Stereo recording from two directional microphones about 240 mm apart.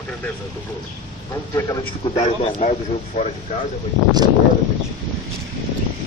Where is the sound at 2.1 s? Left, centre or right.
Left.